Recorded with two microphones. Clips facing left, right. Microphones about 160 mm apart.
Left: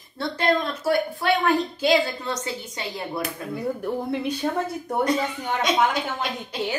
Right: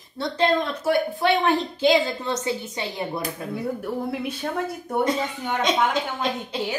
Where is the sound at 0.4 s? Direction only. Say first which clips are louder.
Right 1 dB; 20° right (ahead or behind).